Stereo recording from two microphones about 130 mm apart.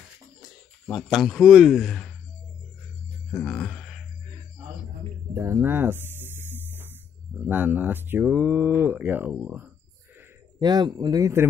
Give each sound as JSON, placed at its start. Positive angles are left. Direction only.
{"t": 0.8, "sound": "speech", "side_deg": 0}
{"t": 3.3, "sound": "speech", "side_deg": 10}
{"t": 5.3, "sound": "speech", "side_deg": -20}
{"t": 10.6, "sound": "speech", "side_deg": -30}